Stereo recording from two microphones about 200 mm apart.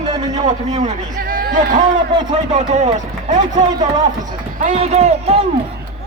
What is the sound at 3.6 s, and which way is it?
Speech, 20° right (ahead or behind).